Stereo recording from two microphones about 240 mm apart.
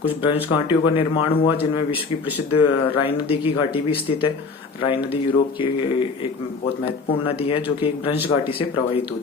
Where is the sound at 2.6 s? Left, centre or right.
Left.